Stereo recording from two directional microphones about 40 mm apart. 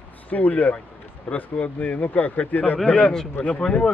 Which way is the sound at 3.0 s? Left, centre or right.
Centre.